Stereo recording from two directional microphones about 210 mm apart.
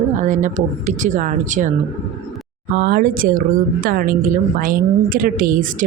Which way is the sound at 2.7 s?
45° right (ahead or behind).